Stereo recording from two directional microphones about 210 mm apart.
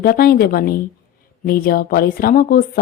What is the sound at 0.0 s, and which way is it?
A woman's voice, 45° left (ahead or behind).